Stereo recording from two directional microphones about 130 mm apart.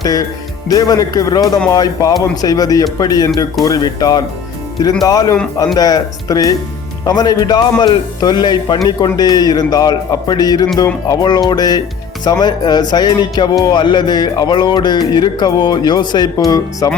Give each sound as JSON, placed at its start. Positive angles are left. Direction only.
{"t": 0.0, "sound": "speech", "side_deg": 30}